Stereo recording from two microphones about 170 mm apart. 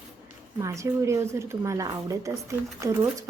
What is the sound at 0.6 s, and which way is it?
A woman's voice, 15° right (ahead or behind).